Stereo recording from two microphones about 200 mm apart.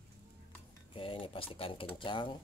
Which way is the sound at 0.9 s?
25° left (ahead or behind).